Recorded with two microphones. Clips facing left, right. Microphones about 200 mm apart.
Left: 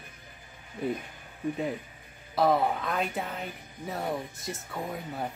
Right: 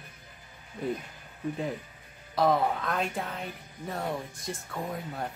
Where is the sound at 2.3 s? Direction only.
Centre (ahead or behind).